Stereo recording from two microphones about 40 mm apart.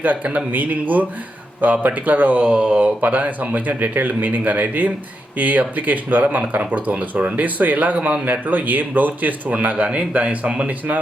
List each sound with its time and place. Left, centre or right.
0.3 s speech: right
2.6 s speech: right
2.8 s speech: right